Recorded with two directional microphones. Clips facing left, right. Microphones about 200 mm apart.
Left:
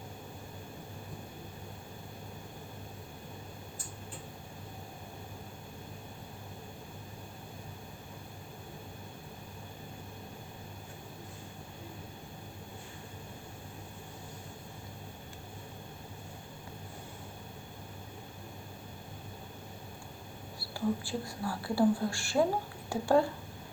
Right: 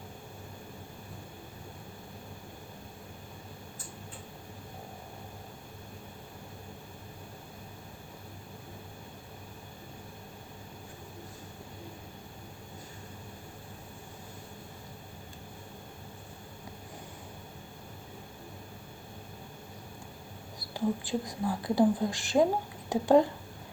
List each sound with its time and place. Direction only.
20.6 s speech: 20° right (ahead or behind)